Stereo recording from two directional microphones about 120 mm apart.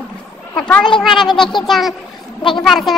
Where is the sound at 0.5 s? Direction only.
5° left (ahead or behind).